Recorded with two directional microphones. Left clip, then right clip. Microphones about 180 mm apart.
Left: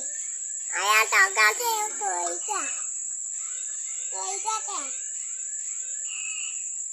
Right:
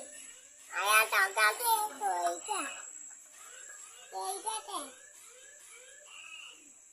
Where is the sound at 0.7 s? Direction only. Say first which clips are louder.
Left 6 dB; 40° left (ahead or behind).